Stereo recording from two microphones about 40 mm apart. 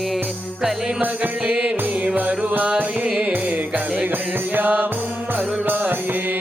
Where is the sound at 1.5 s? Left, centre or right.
Right.